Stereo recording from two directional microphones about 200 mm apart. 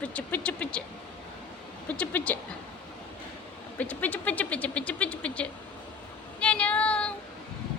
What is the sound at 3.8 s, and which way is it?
Speech, 10° left (ahead or behind).